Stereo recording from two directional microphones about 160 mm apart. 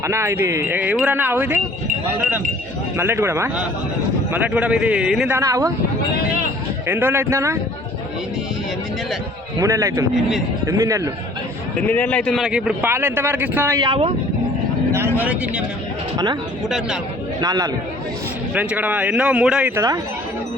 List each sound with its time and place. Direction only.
0.0 s a man's voice: 15° right (ahead or behind); by 5.3 s centre (ahead or behind)
5.3 s a man's voice: 20° right (ahead or behind)
6.8 s a man's voice: 10° right (ahead or behind)
9.6 s a man's voice: 20° right (ahead or behind)
11.8 s a man's voice: 10° left (ahead or behind); by 13.7 s 10° right (ahead or behind)
13.7 s a man's voice: 30° right (ahead or behind)
14.9 s speech: 15° right (ahead or behind)
16.1 s a man's voice: 25° right (ahead or behind)
16.6 s speech: 5° right (ahead or behind)
17.4 s a man's voice: 25° right (ahead or behind)
18.5 s a man's voice: 10° right (ahead or behind)